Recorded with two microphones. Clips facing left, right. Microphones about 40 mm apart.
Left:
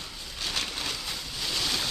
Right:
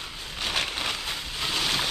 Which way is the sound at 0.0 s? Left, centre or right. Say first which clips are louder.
Right 3 dB; right.